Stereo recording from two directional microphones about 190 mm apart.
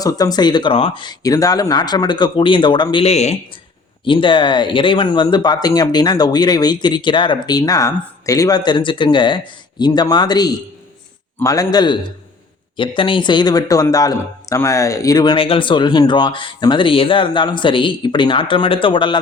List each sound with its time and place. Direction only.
0.0 s speech: 20° left (ahead or behind)